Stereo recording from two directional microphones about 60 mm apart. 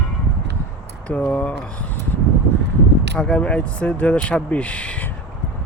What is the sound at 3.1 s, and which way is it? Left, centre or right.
Speech, centre.